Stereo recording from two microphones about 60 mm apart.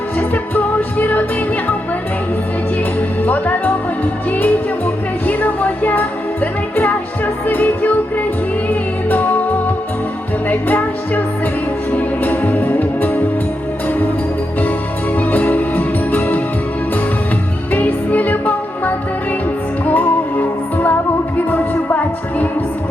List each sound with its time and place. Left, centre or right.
0.2 s music: left
3.2 s speech: left
4.3 s music: left
10.5 s music: left
15.1 s music: left
17.7 s music: left